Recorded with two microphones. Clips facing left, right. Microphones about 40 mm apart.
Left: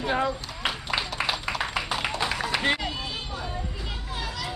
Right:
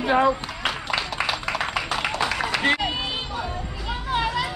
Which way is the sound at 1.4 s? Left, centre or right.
Right.